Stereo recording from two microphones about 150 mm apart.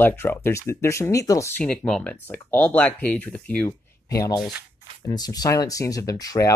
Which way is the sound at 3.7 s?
25° left (ahead or behind).